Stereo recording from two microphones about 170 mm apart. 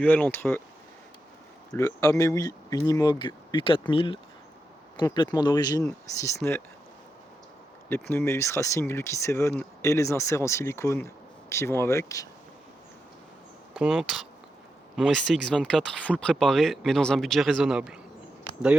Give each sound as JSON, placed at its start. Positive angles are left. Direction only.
{"t": 0.0, "sound": "speech", "side_deg": 10}
{"t": 1.7, "sound": "speech", "side_deg": 20}
{"t": 7.9, "sound": "speech", "side_deg": 15}
{"t": 13.7, "sound": "speech", "side_deg": -5}